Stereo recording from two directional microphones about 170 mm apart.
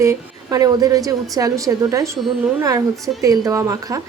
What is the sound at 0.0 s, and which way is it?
A woman's voice, 20° right (ahead or behind).